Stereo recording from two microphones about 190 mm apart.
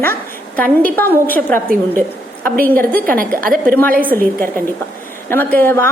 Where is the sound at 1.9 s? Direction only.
10° left (ahead or behind).